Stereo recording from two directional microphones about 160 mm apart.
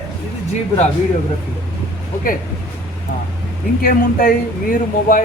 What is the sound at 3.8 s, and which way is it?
A man's voice, 65° left (ahead or behind).